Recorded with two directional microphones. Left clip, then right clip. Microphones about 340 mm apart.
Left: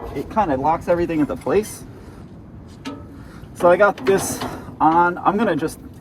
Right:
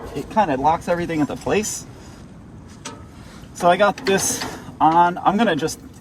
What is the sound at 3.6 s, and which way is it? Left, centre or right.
Speech, right.